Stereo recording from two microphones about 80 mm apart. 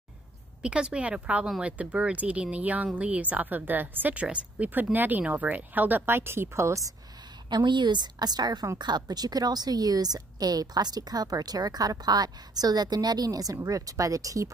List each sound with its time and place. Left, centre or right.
0.6 s speech: centre; by 6.9 s right
7.4 s a woman's voice: right